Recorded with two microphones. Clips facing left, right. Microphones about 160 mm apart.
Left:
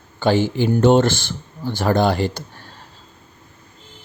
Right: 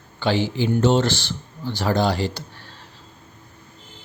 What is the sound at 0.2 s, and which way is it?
Speech, 45° left (ahead or behind).